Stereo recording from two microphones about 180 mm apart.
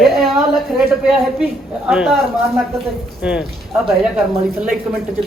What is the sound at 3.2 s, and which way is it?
Speech, 5° right (ahead or behind).